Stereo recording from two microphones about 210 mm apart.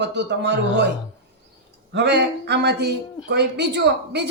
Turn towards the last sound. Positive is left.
turn(degrees=-55)  # may be behind; listen again after turning